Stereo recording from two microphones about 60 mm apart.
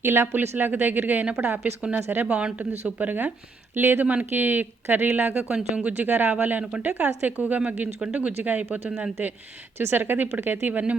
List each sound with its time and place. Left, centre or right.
0.0 s speech: right
2.2 s speech: centre; by 4.0 s right
4.0 s speech: right
5.5 s speech: centre
9.7 s speech: right